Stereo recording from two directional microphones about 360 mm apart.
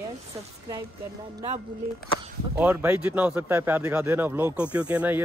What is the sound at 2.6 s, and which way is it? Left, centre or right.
A man's voice, centre.